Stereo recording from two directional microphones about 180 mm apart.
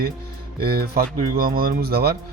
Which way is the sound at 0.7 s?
55° right (ahead or behind).